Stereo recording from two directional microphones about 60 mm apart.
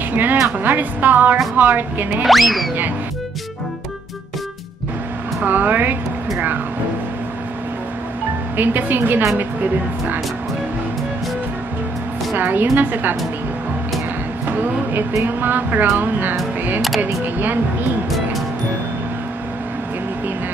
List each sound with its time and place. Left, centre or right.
0.1 s speech: right
2.2 s speech: centre
5.4 s speech: right
8.5 s speech: right
12.4 s speech: right
15.2 s speech: right